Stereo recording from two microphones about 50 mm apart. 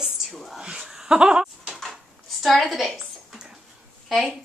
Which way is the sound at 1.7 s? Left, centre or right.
Centre.